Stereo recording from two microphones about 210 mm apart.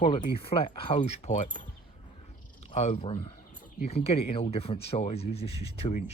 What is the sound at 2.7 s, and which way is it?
Speech, 35° left (ahead or behind).